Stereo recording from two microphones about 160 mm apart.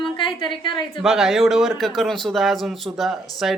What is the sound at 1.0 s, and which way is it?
Speech, centre (ahead or behind).